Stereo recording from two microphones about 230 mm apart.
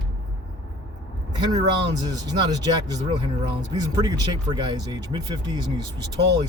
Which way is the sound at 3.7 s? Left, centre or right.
Centre.